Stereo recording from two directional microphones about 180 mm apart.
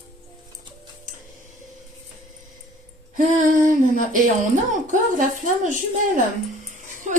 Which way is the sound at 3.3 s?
45° right (ahead or behind).